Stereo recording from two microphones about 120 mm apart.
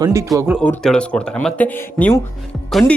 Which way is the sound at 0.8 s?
5° left (ahead or behind).